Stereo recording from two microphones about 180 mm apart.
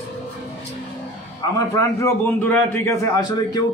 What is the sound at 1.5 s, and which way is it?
A man's voice, 20° left (ahead or behind).